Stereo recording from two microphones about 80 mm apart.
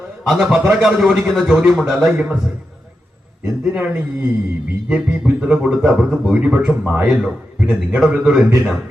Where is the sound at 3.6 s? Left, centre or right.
Centre.